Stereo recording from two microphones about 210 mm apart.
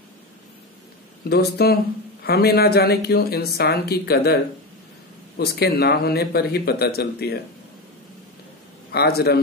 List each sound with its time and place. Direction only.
1.3 s speech: 50° left (ahead or behind)
5.4 s speech: 50° left (ahead or behind)
8.9 s speech: 50° left (ahead or behind)